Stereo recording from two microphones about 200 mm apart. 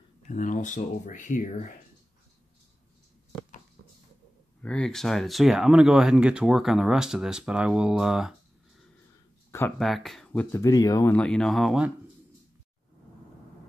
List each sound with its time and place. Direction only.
0.3 s speech: 40° left (ahead or behind)
4.6 s speech: 5° left (ahead or behind)
9.8 s speech: centre (ahead or behind)